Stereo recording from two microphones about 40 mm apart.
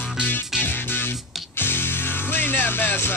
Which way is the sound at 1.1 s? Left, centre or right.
Centre.